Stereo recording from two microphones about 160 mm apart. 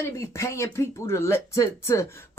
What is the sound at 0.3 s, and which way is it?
Speech, 15° left (ahead or behind).